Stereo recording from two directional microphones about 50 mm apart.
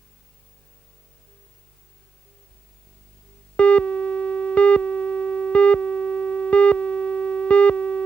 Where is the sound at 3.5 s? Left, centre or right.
Left.